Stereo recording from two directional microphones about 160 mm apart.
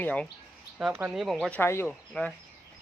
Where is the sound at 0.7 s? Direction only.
10° right (ahead or behind).